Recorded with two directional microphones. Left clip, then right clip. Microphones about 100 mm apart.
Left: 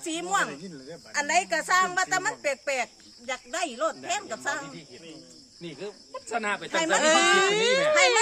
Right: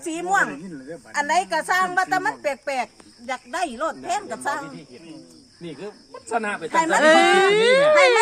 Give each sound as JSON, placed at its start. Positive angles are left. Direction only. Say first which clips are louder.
{"t": 0.0, "sound": "a woman's voice", "louder": "right 6 dB", "side_deg": 10}
{"t": 5.8, "sound": "a woman's voice", "louder": "right 1 dB", "side_deg": 5}
{"t": 7.0, "sound": "speech", "louder": "right 6 dB", "side_deg": -50}